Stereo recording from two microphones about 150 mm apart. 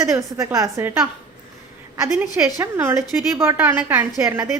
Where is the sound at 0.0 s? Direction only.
20° right (ahead or behind).